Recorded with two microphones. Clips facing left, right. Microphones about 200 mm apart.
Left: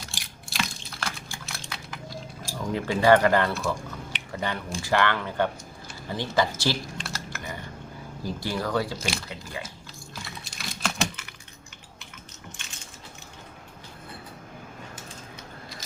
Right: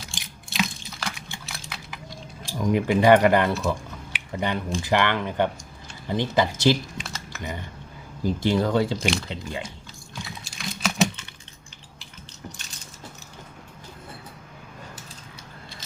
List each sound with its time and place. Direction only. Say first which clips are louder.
0.1 s typing: right 2 dB; centre (ahead or behind)
1.3 s a sound: even; centre (ahead or behind)
2.6 s speech: right 5 dB; 15° right (ahead or behind)
7.0 s typing: left 1 dB; centre (ahead or behind)
8.2 s speech: right 8 dB; 20° right (ahead or behind)
9.0 s speech: right 6 dB; 5° left (ahead or behind)
9.3 s speech: right 5 dB; 25° right (ahead or behind)
10.2 s typing: right 4 dB; centre (ahead or behind)